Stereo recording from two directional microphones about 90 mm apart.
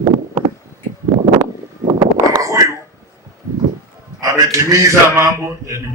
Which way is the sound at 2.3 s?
35° right (ahead or behind).